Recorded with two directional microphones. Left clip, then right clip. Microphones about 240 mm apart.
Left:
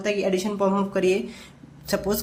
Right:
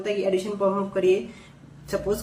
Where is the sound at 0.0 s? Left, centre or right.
Left.